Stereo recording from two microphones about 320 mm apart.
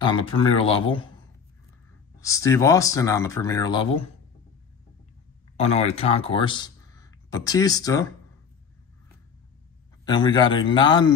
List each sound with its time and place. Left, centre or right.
0.0 s speech: centre
2.1 s speech: centre
5.6 s speech: centre
10.0 s speech: centre